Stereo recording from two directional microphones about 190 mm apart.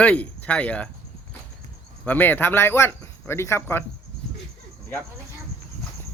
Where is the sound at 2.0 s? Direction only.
10° left (ahead or behind).